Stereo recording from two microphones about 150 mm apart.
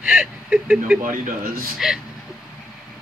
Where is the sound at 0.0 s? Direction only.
5° right (ahead or behind).